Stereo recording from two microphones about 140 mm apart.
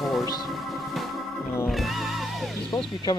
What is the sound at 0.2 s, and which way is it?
Music, 25° left (ahead or behind).